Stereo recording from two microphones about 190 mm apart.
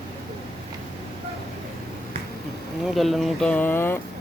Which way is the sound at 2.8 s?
Centre (ahead or behind).